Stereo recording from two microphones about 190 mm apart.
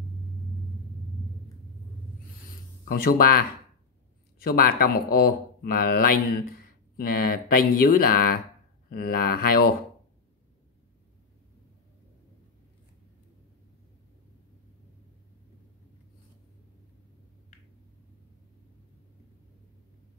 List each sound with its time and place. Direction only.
2.8 s speech: 50° left (ahead or behind)